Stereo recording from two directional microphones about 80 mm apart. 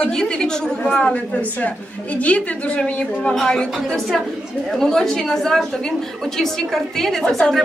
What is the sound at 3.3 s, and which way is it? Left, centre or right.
A woman's voice, centre.